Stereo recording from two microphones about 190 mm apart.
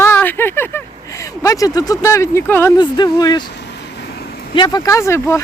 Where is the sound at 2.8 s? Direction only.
20° left (ahead or behind).